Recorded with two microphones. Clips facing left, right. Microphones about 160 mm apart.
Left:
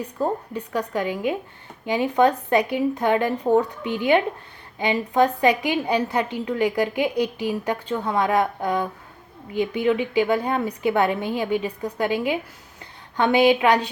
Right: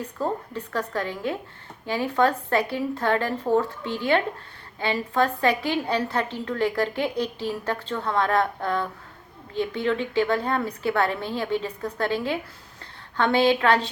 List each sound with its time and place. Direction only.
0.0 s a woman's voice: 15° left (ahead or behind)